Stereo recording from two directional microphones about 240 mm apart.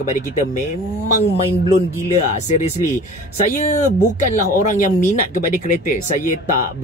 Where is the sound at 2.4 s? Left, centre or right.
Left.